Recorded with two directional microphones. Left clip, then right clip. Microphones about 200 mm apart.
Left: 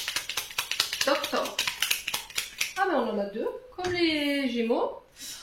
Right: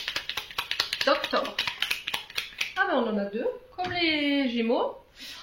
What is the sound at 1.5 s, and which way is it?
Scissors, 30° right (ahead or behind).